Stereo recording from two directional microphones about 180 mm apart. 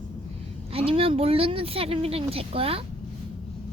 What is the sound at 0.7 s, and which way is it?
Speech, 30° right (ahead or behind).